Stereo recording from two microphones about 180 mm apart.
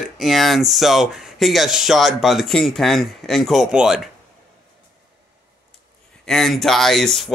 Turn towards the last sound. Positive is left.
turn(degrees=0)  # may be behind; listen again after turning